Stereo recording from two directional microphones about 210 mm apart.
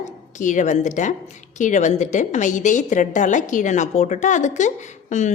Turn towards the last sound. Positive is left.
turn(degrees=35)  # may be behind; listen again after turning